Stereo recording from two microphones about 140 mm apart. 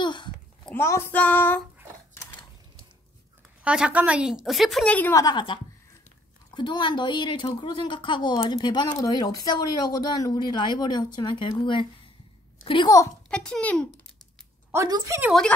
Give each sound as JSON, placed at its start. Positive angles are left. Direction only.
{"t": 0.0, "sound": "a sound", "side_deg": 30}
{"t": 0.7, "sound": "child singing", "side_deg": 20}
{"t": 3.6, "sound": "a woman's voice", "side_deg": -5}
{"t": 4.9, "sound": "child singing", "side_deg": 15}
{"t": 5.2, "sound": "a woman's voice", "side_deg": 35}
{"t": 13.3, "sound": "a woman's voice", "side_deg": 5}
{"t": 15.1, "sound": "a woman's voice", "side_deg": -20}